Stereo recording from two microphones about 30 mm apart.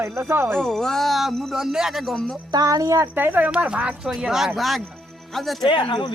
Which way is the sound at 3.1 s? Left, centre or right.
Right.